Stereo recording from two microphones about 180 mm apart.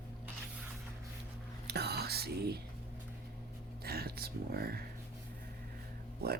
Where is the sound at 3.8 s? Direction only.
60° right (ahead or behind).